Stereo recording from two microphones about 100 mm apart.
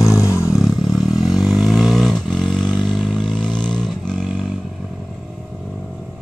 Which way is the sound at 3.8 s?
Centre (ahead or behind).